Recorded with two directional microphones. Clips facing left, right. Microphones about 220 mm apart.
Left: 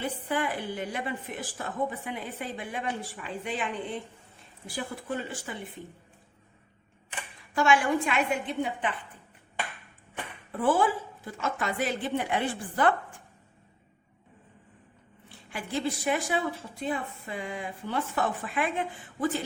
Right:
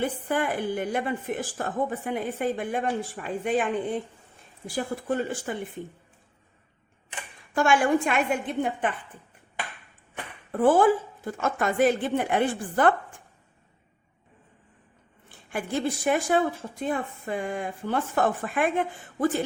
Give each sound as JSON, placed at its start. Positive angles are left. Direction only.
{"t": 0.0, "sound": "a woman's voice", "side_deg": -50}
{"t": 7.5, "sound": "a woman's voice", "side_deg": -50}
{"t": 10.6, "sound": "a woman's voice", "side_deg": -50}
{"t": 15.4, "sound": "a woman's voice", "side_deg": -50}